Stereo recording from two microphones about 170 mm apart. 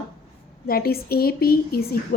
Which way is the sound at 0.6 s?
65° left (ahead or behind).